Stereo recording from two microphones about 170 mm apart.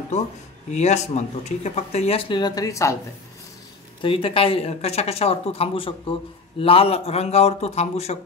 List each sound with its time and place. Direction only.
0.7 s speech: 40° left (ahead or behind); by 3.0 s 20° left (ahead or behind)
4.0 s speech: 30° left (ahead or behind)